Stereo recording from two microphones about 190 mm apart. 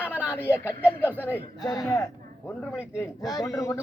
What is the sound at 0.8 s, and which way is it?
Speech, 10° right (ahead or behind).